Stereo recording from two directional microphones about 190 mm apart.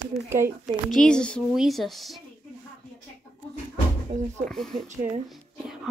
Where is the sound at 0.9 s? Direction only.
5° left (ahead or behind).